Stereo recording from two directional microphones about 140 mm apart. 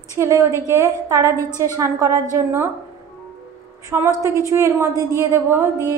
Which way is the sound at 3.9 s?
15° right (ahead or behind).